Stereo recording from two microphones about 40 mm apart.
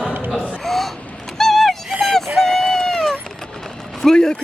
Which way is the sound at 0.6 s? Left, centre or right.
Centre.